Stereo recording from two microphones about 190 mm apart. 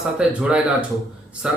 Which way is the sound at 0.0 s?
5° right (ahead or behind).